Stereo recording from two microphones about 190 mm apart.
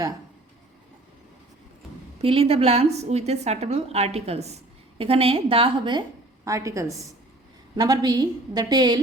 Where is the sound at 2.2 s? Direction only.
30° right (ahead or behind).